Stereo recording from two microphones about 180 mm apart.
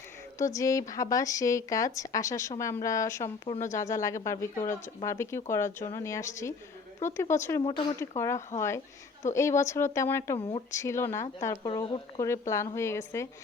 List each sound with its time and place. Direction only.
0.3 s speech: 15° left (ahead or behind)
4.5 s speech: 40° left (ahead or behind)
5.0 s speech: 15° left (ahead or behind)
7.6 s speech: 30° left (ahead or behind)
8.1 s speech: 15° left (ahead or behind)